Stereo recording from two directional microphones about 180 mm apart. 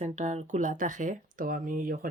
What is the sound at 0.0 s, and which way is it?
Speech, 40° right (ahead or behind).